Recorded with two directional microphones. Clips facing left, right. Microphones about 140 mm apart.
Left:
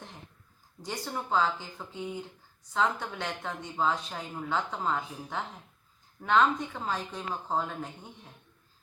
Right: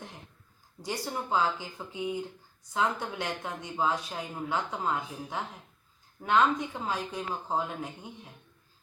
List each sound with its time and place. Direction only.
0.8 s speech: 10° right (ahead or behind)